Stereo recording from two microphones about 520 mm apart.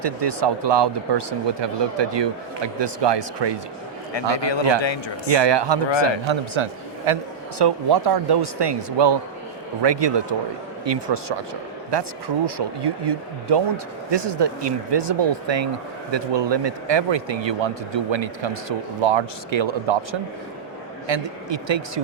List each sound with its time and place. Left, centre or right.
0.0 s speech: right
4.4 s a man's voice: left
5.3 s speech: right
7.6 s speech: right
21.1 s speech: right